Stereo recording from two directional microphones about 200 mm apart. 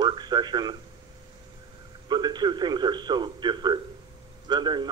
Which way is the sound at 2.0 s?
20° right (ahead or behind).